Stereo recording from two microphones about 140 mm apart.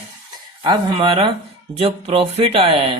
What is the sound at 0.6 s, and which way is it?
Speech, 35° right (ahead or behind).